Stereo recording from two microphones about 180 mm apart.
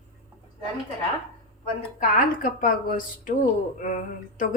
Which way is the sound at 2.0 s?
50° left (ahead or behind).